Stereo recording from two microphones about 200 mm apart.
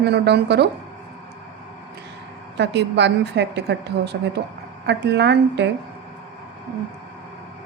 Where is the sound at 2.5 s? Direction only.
60° right (ahead or behind).